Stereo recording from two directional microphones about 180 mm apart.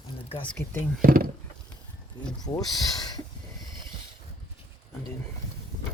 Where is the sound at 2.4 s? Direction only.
20° left (ahead or behind).